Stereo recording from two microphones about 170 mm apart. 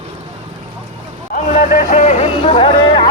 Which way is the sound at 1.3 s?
50° left (ahead or behind).